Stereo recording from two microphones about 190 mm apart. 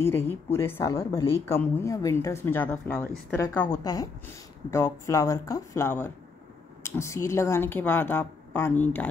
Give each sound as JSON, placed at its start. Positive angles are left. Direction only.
{"t": 0.0, "sound": "a woman's voice", "side_deg": 10}